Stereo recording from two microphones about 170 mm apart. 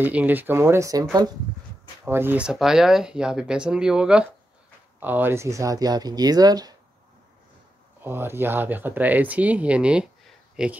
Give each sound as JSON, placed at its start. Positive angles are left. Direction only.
{"t": 0.0, "sound": "speech", "side_deg": -10}
{"t": 2.0, "sound": "speech", "side_deg": -15}
{"t": 8.0, "sound": "speech", "side_deg": -15}
{"t": 10.5, "sound": "a sound", "side_deg": -5}